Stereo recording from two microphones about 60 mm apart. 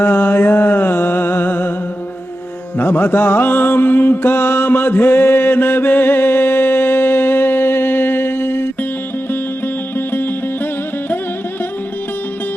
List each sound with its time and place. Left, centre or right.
0.0 s music: left
2.7 s music: left
10.1 s music: left